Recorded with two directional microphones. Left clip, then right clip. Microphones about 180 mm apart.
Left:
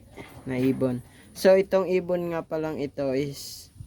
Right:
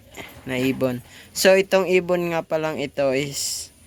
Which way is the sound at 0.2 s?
5° left (ahead or behind).